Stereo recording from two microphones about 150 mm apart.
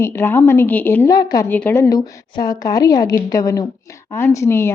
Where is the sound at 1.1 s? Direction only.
25° left (ahead or behind).